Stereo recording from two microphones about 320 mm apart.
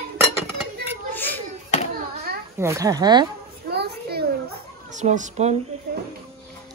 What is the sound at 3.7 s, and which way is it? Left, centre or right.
Children playing, right.